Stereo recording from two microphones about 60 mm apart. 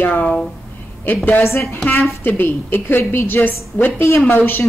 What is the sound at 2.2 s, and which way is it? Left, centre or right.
A woman's voice, left.